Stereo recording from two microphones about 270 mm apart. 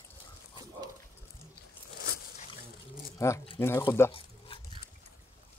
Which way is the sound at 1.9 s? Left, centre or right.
Left.